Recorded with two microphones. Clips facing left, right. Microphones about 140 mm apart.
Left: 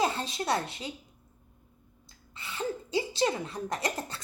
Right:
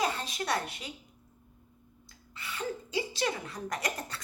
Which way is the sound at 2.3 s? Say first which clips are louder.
Left 2 dB; 25° left (ahead or behind).